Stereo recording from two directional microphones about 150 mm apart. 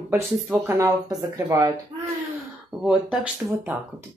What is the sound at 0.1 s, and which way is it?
A woman's voice, 15° right (ahead or behind).